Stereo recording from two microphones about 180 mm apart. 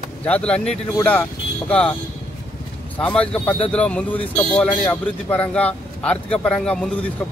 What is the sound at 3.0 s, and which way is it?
A man's voice, 5° left (ahead or behind).